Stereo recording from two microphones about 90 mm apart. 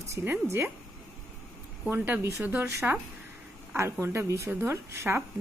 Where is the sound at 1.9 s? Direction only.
20° right (ahead or behind).